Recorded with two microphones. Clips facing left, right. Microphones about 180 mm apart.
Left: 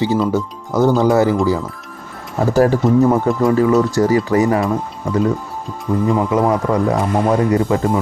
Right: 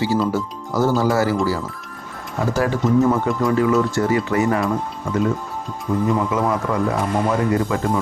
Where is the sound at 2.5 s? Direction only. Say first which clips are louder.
Left 5 dB; 40° left (ahead or behind).